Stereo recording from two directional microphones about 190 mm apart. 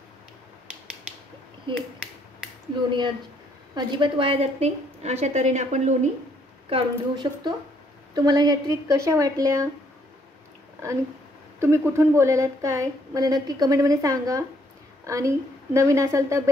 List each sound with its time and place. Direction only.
3.7 s a woman's voice: 25° right (ahead or behind)
6.7 s a woman's voice: 25° right (ahead or behind)
11.6 s a woman's voice: 15° right (ahead or behind)